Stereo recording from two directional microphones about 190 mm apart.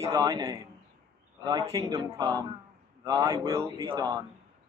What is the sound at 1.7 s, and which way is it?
Speech, 20° right (ahead or behind).